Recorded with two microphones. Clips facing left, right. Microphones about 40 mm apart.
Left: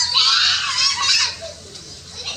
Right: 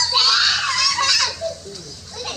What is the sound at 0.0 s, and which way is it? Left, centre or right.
Screaming, left.